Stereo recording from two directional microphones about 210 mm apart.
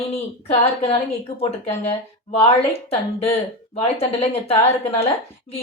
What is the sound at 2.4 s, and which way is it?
A woman's voice, 30° left (ahead or behind).